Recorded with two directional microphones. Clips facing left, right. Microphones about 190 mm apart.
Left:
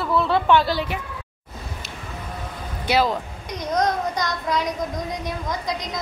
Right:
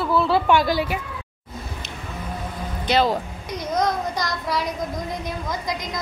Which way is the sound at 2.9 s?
10° left (ahead or behind).